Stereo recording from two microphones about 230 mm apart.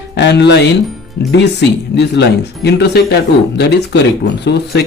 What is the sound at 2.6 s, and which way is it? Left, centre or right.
Speech, left.